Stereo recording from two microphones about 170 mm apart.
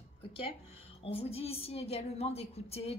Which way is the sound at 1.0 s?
35° left (ahead or behind).